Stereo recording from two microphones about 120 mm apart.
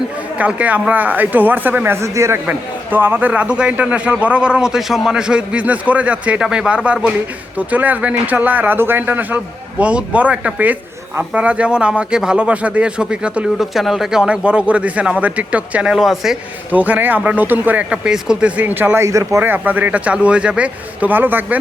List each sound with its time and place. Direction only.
0.3 s speech: 10° right (ahead or behind)